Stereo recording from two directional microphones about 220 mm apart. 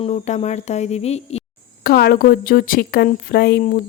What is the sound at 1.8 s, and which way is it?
Speech, 45° left (ahead or behind).